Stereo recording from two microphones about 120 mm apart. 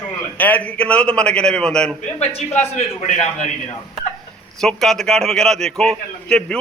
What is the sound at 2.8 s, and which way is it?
Speech, 90° left.